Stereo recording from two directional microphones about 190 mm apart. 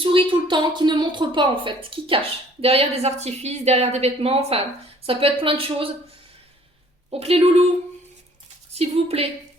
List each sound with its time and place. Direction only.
0.0 s a woman's voice: 25° right (ahead or behind)
7.1 s a woman's voice: 30° right (ahead or behind)
8.7 s a woman's voice: 30° right (ahead or behind)